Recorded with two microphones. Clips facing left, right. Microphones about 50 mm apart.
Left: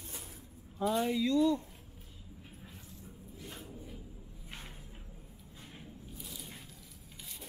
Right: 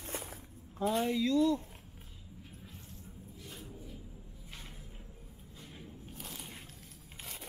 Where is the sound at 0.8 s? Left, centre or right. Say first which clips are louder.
Even; centre.